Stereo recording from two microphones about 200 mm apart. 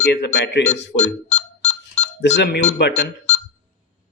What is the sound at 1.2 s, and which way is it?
Ringtone, 30° left (ahead or behind).